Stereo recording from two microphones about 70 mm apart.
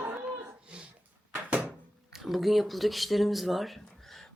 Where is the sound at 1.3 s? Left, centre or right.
Right.